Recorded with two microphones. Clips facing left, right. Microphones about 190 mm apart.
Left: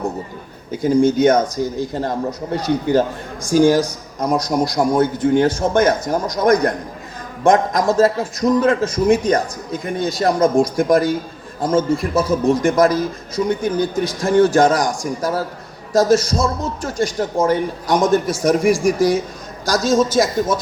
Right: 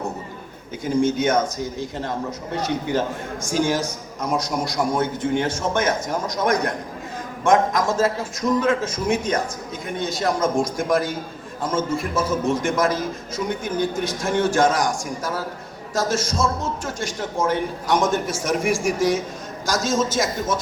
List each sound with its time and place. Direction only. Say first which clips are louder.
0.7 s a man's voice: left 6 dB; 35° left (ahead or behind)